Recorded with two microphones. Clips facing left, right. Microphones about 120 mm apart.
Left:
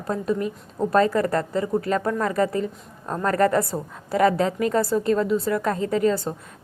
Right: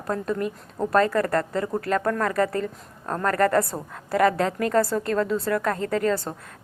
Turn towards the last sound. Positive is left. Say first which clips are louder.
# left 2 dB
turn(degrees=15)  # may be behind; listen again after turning